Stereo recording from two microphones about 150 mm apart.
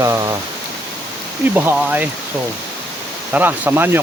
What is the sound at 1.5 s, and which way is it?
Speech, 10° right (ahead or behind).